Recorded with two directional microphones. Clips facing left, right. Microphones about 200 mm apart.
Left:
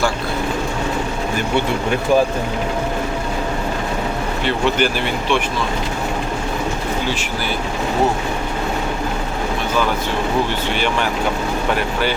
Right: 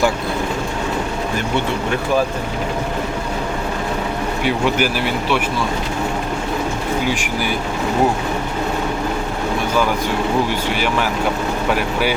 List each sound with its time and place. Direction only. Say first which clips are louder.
4.4 s speech: even; 10° right (ahead or behind)
10.8 s speech: left 1 dB; 5° right (ahead or behind)